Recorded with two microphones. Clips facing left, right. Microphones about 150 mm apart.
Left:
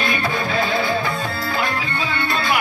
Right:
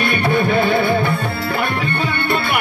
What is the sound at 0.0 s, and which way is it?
Music, 65° right (ahead or behind).